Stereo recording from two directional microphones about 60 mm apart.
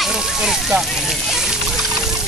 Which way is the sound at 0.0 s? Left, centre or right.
Centre.